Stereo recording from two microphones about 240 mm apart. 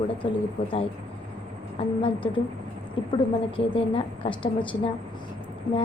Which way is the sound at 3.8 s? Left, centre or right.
Left.